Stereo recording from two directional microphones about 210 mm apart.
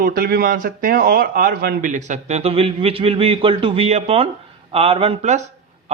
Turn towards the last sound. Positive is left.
turn(degrees=-35)  # may be behind; listen again after turning